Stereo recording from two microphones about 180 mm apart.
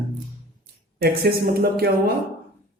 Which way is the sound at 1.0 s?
60° right (ahead or behind).